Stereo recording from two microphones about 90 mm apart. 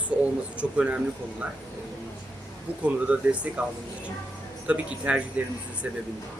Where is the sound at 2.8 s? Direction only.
15° right (ahead or behind).